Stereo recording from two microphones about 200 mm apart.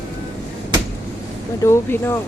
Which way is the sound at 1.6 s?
10° left (ahead or behind).